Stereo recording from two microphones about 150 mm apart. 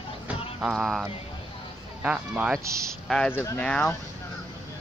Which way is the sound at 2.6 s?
20° right (ahead or behind).